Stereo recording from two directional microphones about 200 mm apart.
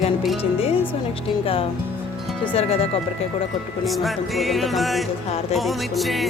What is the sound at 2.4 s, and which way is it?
Speech, 30° left (ahead or behind).